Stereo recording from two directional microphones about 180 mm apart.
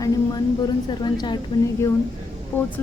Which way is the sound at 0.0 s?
20° left (ahead or behind).